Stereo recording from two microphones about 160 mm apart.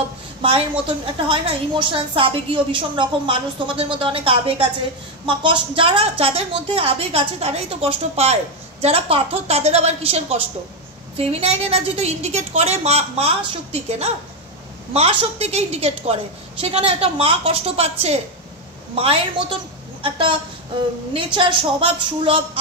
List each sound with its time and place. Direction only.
0.4 s a woman's voice: 35° right (ahead or behind)